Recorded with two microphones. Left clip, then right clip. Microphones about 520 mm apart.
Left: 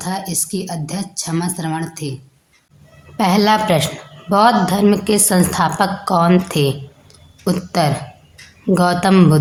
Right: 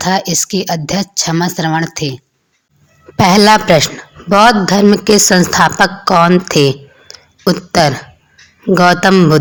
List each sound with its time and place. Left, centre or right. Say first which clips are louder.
0.0 s a man's voice: right 10 dB; left
3.2 s a man's voice: right 7 dB; left